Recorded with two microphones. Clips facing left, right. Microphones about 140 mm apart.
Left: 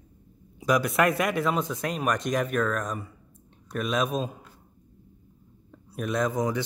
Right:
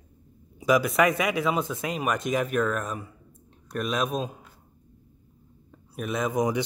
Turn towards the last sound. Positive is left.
turn(degrees=-15)  # may be behind; listen again after turning